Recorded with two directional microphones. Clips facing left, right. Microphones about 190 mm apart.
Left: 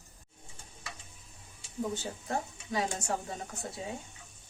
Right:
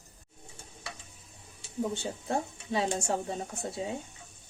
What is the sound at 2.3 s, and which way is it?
A woman's voice, 25° right (ahead or behind).